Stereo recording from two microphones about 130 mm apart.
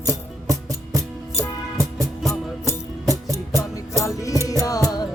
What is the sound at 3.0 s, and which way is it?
Music, 25° right (ahead or behind).